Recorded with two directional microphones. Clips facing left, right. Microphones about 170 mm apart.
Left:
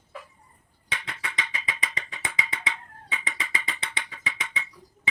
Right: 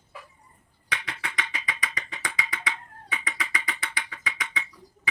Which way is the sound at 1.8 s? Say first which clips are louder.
Even; 25° left (ahead or behind).